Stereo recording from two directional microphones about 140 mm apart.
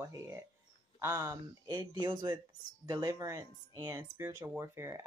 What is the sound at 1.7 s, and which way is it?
Speech, 30° right (ahead or behind).